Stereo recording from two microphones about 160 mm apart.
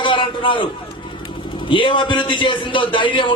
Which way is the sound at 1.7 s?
30° left (ahead or behind).